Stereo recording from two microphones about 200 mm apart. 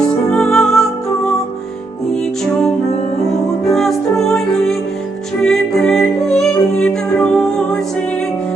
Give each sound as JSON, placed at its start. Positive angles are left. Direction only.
{"t": 0.3, "sound": "music", "side_deg": 5}
{"t": 3.6, "sound": "music", "side_deg": 0}